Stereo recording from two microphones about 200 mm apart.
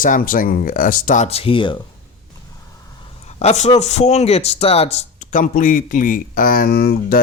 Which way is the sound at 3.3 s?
35° left (ahead or behind).